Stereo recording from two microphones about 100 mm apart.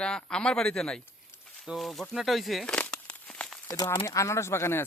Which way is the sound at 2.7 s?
10° left (ahead or behind).